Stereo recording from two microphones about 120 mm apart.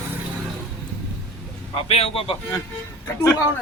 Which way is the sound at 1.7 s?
55° left (ahead or behind).